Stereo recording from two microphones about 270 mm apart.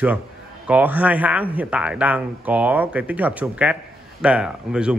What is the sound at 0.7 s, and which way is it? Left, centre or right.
Speech, centre.